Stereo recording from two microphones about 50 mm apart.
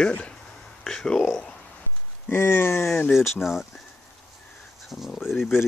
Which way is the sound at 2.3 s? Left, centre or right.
Left.